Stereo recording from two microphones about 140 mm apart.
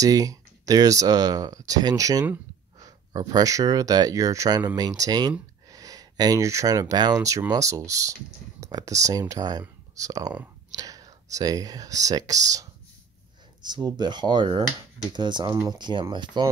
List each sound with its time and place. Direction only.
0.0 s speech: 25° right (ahead or behind)